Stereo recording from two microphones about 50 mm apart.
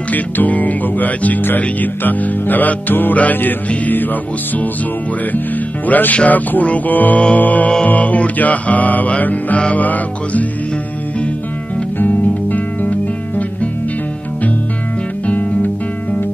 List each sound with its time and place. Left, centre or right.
0.1 s music: left
5.9 s music: left
12.0 s music: left
15.2 s guitar: left